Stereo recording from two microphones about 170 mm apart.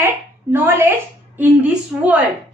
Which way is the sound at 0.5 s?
10° right (ahead or behind).